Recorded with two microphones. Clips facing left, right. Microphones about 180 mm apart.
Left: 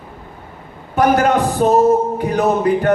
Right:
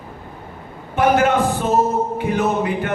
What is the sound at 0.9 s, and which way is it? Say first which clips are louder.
Speech: left 2 dB; 40° left (ahead or behind).